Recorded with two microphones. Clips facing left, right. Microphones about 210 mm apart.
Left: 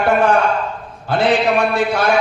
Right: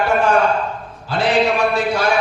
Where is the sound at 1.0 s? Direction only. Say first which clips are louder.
Left 1 dB; 55° left (ahead or behind).